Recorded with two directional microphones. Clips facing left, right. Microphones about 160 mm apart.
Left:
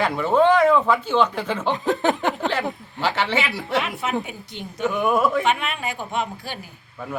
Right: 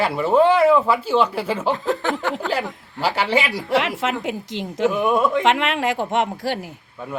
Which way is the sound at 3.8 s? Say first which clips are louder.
Right 2 dB; 90° right.